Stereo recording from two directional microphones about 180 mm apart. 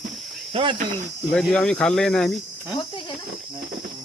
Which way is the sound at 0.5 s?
30° right (ahead or behind).